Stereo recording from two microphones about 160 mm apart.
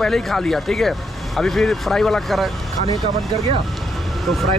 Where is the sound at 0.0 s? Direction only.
Centre (ahead or behind).